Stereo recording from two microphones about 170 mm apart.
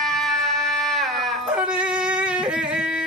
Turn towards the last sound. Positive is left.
turn(degrees=-5)  # may be behind; listen again after turning